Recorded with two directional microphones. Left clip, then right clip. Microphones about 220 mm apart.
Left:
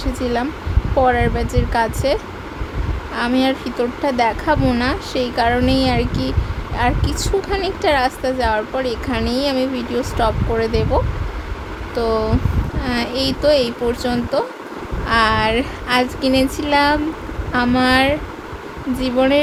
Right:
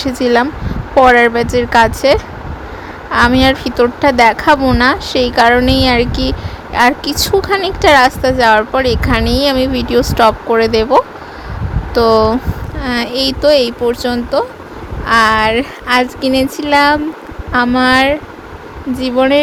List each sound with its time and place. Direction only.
0.0 s a woman's voice: 25° right (ahead or behind)